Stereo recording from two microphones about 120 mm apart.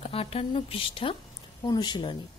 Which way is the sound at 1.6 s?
35° left (ahead or behind).